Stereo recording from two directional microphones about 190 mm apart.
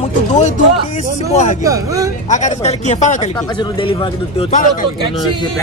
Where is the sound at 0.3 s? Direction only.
40° left (ahead or behind).